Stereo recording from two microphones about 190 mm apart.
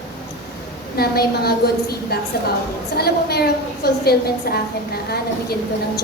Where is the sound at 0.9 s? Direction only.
55° left (ahead or behind).